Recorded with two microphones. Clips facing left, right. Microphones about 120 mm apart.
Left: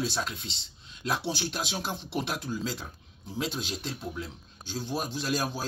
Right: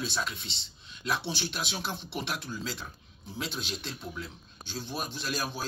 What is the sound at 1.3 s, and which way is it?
Speech, 40° left (ahead or behind).